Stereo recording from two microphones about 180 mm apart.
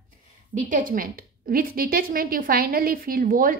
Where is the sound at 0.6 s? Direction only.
45° right (ahead or behind).